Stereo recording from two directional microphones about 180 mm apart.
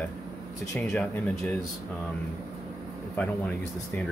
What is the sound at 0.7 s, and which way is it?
Speech, 5° left (ahead or behind).